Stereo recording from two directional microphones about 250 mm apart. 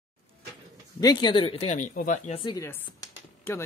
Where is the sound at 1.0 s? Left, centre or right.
Centre.